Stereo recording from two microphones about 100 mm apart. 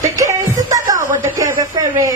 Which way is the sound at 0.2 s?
35° right (ahead or behind).